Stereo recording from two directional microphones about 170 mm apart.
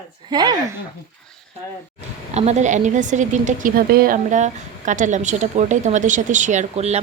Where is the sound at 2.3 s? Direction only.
40° right (ahead or behind).